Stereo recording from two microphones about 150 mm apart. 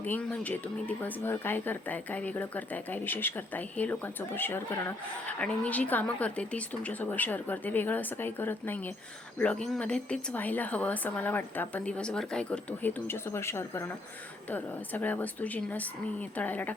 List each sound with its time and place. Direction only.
0.0 s speech: 10° left (ahead or behind)